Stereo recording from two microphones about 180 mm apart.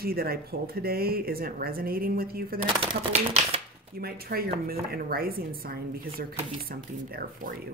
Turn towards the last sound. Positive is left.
turn(degrees=-55)  # may be behind; listen again after turning